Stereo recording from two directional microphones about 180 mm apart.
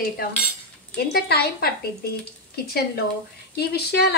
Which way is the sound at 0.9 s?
60° left (ahead or behind).